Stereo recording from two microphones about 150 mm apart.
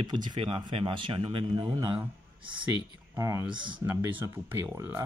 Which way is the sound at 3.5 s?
30° right (ahead or behind).